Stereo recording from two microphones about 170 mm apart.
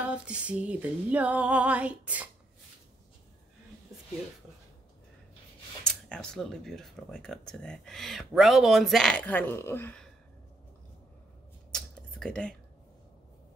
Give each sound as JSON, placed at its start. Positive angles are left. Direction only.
{"t": 0.1, "sound": "female singing", "side_deg": -5}
{"t": 5.9, "sound": "speech", "side_deg": 5}
{"t": 11.7, "sound": "computer keyboard", "side_deg": 5}